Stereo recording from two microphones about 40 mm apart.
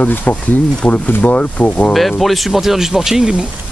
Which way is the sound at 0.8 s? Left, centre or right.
Left.